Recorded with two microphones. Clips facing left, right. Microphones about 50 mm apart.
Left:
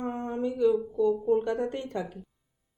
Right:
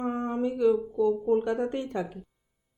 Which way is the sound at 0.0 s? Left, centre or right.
Centre.